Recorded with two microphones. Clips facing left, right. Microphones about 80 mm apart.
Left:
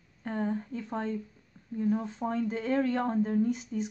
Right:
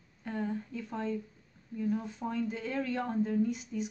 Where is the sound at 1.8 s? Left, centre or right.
Left.